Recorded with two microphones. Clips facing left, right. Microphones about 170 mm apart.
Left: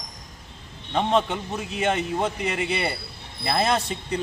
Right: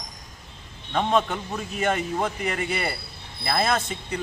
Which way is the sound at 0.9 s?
25° left (ahead or behind).